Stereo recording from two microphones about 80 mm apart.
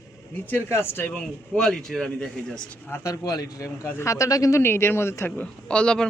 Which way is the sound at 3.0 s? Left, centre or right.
Left.